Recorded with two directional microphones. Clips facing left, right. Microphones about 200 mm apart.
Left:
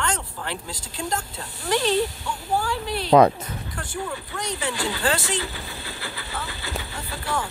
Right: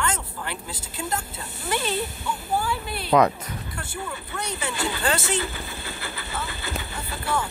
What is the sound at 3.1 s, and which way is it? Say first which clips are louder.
Speech: left 4 dB; 30° left (ahead or behind).